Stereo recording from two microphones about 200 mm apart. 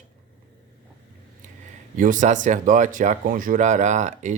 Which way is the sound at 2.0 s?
40° right (ahead or behind).